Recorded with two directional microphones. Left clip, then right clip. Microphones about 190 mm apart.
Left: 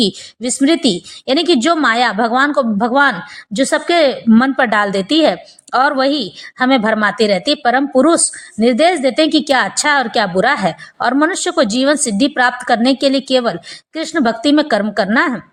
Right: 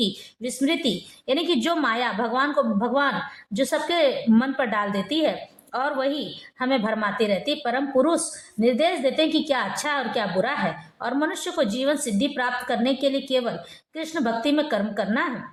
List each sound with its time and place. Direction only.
0.0 s a woman's voice: 30° left (ahead or behind)